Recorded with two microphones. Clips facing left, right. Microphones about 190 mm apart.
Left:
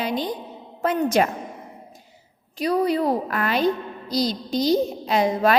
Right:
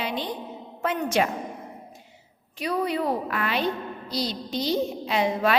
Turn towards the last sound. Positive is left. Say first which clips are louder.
# left 4 dB
turn(degrees=40)  # may be behind; listen again after turning